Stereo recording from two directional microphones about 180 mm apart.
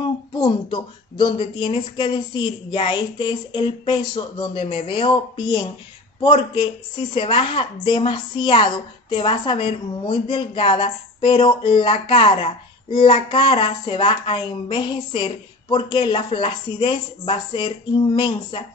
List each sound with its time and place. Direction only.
0.4 s a woman's voice: 25° left (ahead or behind)